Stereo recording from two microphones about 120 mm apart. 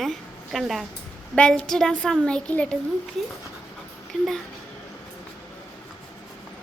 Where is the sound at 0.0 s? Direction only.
Centre (ahead or behind).